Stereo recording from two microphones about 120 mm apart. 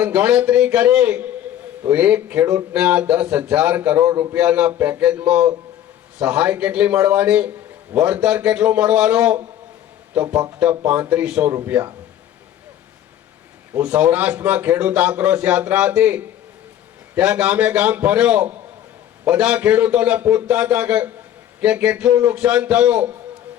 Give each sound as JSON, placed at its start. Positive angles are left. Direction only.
{"t": 0.0, "sound": "a man's voice", "side_deg": -15}
{"t": 10.5, "sound": "a man's voice", "side_deg": -10}
{"t": 13.7, "sound": "a man's voice", "side_deg": -10}